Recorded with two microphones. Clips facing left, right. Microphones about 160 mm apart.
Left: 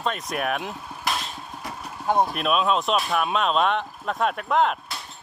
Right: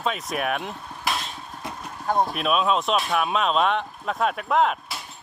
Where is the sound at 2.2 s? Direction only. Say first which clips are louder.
Right 2 dB; centre (ahead or behind).